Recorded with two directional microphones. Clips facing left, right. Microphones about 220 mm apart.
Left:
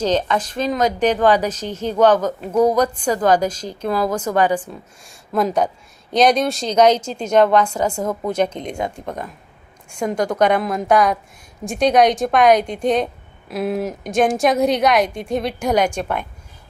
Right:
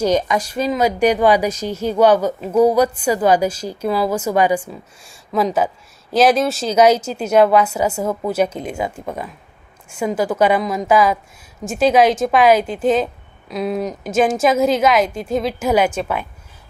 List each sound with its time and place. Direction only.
0.0 s a woman's voice: 10° right (ahead or behind)